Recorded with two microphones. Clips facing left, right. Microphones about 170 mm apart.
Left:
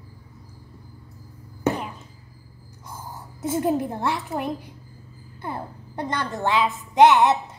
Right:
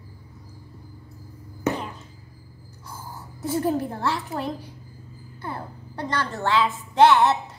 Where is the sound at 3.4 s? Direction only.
20° left (ahead or behind).